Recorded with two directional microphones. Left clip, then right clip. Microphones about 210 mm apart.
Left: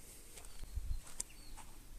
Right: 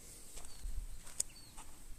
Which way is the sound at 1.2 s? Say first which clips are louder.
Right 6 dB; 5° right (ahead or behind).